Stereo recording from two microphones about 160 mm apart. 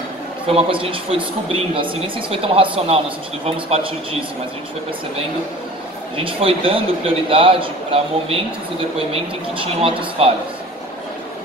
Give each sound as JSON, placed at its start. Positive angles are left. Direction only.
{"t": 0.5, "sound": "speech", "side_deg": -35}
{"t": 6.1, "sound": "speech", "side_deg": -35}